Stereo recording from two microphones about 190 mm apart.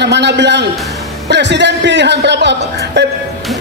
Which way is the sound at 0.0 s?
65° right (ahead or behind).